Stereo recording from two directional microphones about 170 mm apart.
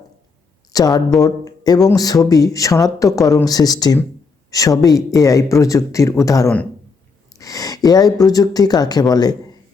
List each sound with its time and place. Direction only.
0.7 s speech: 20° left (ahead or behind)